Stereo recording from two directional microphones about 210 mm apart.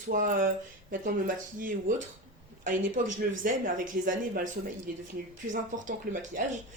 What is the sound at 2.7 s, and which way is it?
Speech, 40° right (ahead or behind).